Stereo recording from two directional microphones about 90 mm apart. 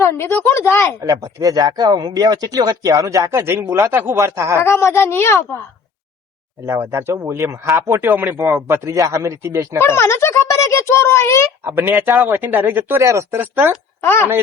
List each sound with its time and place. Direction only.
0.0 s speech: 30° left (ahead or behind)
1.0 s a man's voice: 40° right (ahead or behind)
1.9 s a man's voice: 50° right (ahead or behind); by 4.5 s 35° right (ahead or behind)
4.5 s speech: 30° left (ahead or behind)
6.7 s a man's voice: 30° right (ahead or behind)
8.9 s a man's voice: 40° right (ahead or behind)
9.8 s speech: 30° left (ahead or behind)
11.6 s speech: 25° right (ahead or behind)
13.0 s a man's voice: 35° right (ahead or behind)
13.4 s speech: 25° right (ahead or behind)
14.0 s speech: 25° left (ahead or behind)